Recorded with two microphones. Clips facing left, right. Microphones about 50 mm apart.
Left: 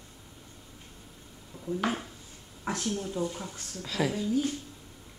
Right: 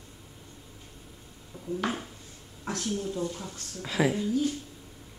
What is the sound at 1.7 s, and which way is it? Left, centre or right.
Speech, centre.